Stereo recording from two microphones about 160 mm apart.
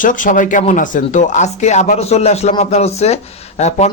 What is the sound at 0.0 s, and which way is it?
Speech, 55° left (ahead or behind).